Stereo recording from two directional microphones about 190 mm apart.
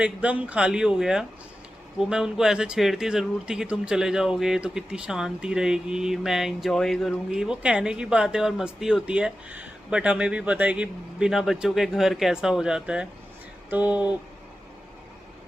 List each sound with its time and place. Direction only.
0.0 s speech: 5° right (ahead or behind)